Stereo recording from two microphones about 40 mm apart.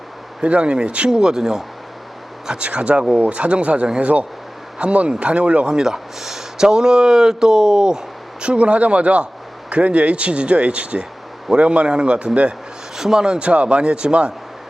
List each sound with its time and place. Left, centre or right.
0.4 s speech: right
2.6 s speech: right
5.6 s speech: centre
13.0 s speech: centre
13.4 s speech: right